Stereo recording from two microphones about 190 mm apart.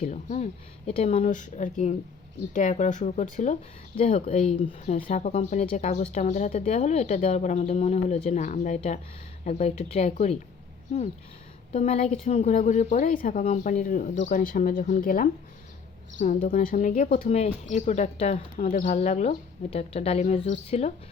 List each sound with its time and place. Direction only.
0.0 s speech: 40° left (ahead or behind)
5.0 s speech: 40° left (ahead or behind)
11.7 s speech: 35° left (ahead or behind)